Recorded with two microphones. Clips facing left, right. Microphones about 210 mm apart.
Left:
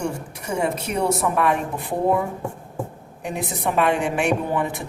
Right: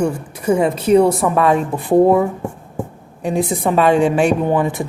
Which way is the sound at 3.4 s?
90° right.